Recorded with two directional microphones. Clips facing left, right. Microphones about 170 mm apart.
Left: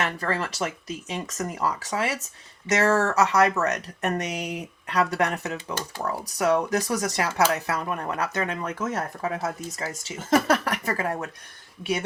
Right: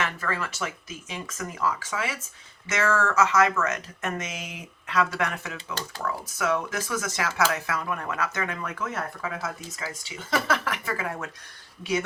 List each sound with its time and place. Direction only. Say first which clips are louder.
0.2 s speech: left 3 dB; 35° left (ahead or behind)